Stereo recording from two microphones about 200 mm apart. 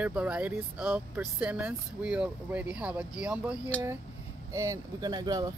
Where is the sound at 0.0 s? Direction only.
5° right (ahead or behind).